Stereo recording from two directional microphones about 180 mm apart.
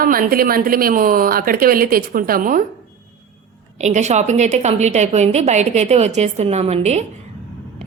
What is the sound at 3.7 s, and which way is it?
A woman's voice, 40° right (ahead or behind).